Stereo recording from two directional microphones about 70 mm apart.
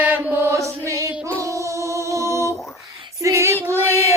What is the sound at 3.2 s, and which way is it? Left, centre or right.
Female singing, right.